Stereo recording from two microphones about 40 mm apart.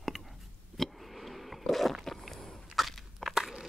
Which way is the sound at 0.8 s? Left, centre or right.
Centre.